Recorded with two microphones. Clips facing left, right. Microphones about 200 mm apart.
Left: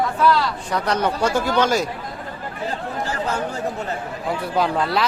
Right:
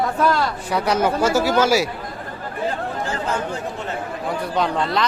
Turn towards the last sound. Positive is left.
turn(degrees=5)  # may be behind; listen again after turning